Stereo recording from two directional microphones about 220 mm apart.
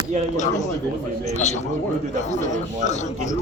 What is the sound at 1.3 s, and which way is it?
Speech, 30° left (ahead or behind).